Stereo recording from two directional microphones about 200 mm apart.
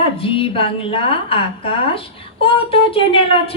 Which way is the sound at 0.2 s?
25° left (ahead or behind).